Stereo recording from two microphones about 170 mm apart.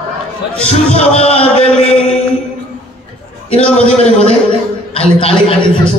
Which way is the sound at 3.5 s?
40° left (ahead or behind).